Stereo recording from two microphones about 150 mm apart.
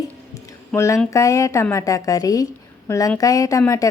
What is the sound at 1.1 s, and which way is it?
A woman's voice, 20° left (ahead or behind).